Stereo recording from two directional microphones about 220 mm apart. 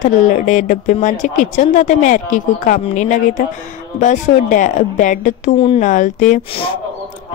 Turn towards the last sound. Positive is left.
turn(degrees=30)  # may be behind; listen again after turning